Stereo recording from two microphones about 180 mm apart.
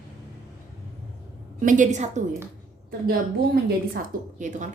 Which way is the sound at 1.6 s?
45° right (ahead or behind).